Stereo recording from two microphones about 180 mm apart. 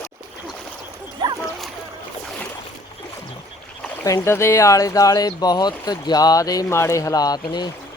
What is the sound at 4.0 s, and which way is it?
Speech, 15° left (ahead or behind).